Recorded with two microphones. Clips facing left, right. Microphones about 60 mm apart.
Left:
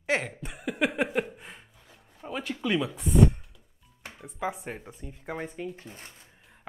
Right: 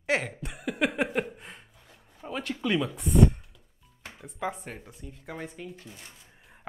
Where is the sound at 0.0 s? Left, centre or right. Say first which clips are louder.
Even; centre.